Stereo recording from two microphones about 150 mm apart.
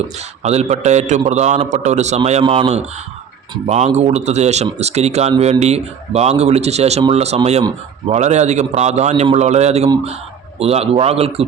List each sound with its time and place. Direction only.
0.2 s a man's voice: 45° right (ahead or behind)